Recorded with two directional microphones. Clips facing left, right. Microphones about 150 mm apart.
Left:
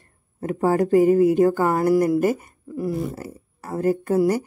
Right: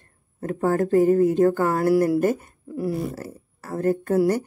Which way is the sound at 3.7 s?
10° left (ahead or behind).